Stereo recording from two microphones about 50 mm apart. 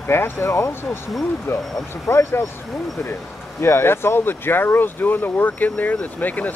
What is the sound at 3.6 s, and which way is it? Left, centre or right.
Speech, left.